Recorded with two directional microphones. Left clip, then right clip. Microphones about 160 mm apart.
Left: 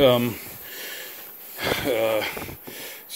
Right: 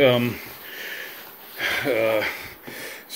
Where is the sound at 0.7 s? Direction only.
30° left (ahead or behind).